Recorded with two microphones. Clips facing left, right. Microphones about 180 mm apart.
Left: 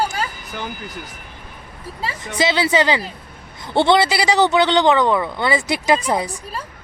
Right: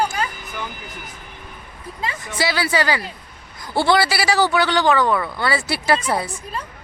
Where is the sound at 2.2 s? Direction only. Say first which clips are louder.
Left 4 dB; 20° left (ahead or behind).